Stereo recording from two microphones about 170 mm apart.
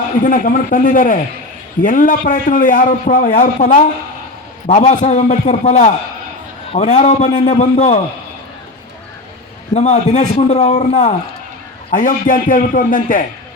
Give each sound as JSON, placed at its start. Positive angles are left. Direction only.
{"t": 0.2, "sound": "a man's voice", "side_deg": 50}
{"t": 9.7, "sound": "a man's voice", "side_deg": 40}